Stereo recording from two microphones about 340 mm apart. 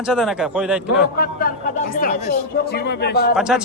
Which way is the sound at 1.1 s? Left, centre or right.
Left.